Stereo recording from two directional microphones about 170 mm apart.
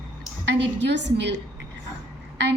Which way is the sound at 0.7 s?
90° right.